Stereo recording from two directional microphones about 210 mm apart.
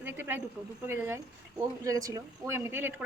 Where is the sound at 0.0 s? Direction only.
10° right (ahead or behind).